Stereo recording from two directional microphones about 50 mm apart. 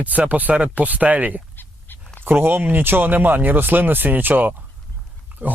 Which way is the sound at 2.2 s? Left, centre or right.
Right.